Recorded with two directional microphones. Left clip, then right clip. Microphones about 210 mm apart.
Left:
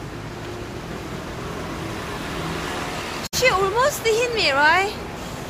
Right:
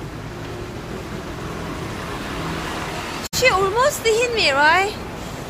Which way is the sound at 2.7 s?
55° left (ahead or behind).